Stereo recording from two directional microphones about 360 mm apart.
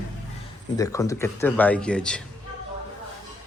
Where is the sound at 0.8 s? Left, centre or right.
Centre.